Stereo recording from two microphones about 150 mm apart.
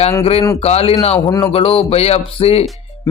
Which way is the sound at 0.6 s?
40° left (ahead or behind).